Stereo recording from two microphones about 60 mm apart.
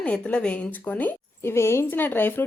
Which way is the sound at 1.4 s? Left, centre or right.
Left.